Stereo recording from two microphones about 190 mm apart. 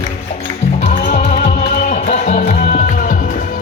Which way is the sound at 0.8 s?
40° left (ahead or behind).